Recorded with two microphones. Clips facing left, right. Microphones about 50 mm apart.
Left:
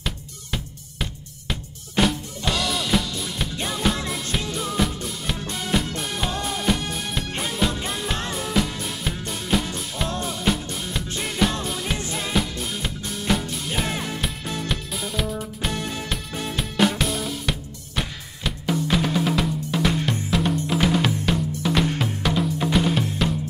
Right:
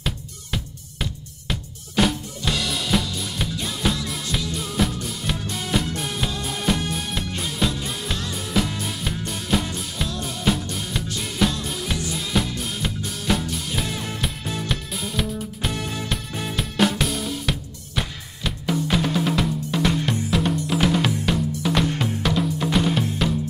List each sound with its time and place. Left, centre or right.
0.0 s music: centre
1.5 s drum kit: centre
3.8 s music: centre
8.4 s drum kit: centre
10.2 s music: centre
12.0 s music: left
12.4 s music: centre
17.0 s drum kit: centre
20.7 s music: centre
21.3 s drum: centre